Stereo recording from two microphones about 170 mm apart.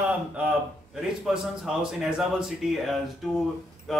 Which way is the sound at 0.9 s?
Centre (ahead or behind).